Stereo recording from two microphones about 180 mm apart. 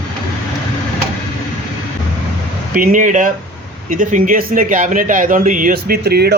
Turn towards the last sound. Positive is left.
turn(degrees=-60)  # may be behind; listen again after turning